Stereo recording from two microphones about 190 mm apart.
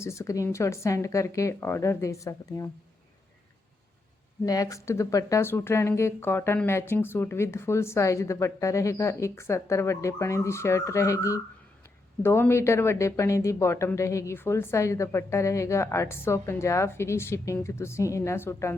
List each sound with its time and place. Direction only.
0.0 s speech: 15° left (ahead or behind)
4.4 s speech: 20° left (ahead or behind)